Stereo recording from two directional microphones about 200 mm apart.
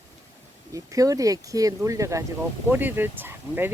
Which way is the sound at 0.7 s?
15° right (ahead or behind).